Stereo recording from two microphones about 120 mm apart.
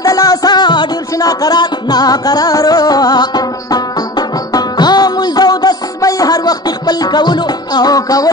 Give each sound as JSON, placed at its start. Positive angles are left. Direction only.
{"t": 0.0, "sound": "music", "side_deg": 30}